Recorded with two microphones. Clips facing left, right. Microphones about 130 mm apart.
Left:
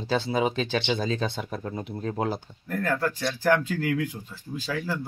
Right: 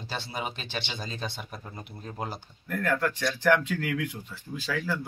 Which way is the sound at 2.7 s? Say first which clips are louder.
Left 1 dB; 35° left (ahead or behind).